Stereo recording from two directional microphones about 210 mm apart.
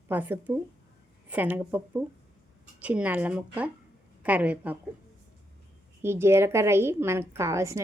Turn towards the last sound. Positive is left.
turn(degrees=-15)  # may be behind; listen again after turning